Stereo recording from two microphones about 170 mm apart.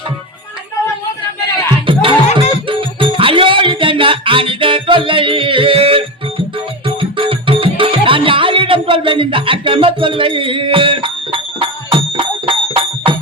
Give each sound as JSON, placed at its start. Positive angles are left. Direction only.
{"t": 1.9, "sound": "music", "side_deg": -30}